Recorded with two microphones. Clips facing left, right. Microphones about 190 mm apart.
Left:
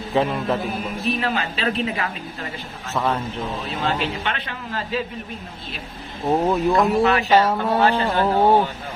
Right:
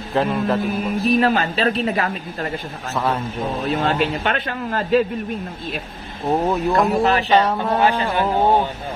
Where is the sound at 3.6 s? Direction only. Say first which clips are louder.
Right 6 dB; 55° right (ahead or behind).